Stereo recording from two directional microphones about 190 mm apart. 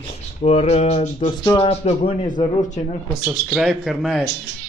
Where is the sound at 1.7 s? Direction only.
30° left (ahead or behind).